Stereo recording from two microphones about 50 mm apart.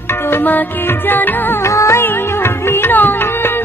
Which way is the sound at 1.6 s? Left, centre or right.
Left.